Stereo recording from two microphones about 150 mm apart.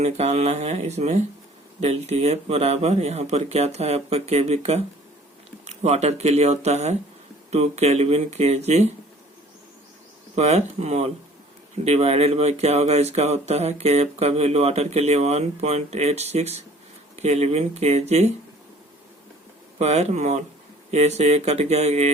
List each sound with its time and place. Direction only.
0.0 s speech: 45° right (ahead or behind)
10.3 s speech: 50° right (ahead or behind)
19.8 s speech: 45° right (ahead or behind)